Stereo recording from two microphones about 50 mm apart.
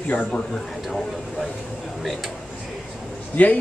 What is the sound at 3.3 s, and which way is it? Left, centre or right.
Speech, left.